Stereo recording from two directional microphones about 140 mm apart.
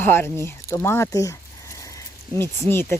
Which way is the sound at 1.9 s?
20° left (ahead or behind).